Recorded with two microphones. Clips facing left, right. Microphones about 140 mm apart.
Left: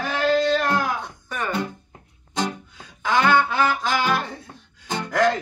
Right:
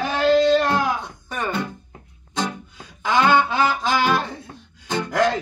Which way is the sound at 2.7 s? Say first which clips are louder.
Right 2 dB; 20° right (ahead or behind).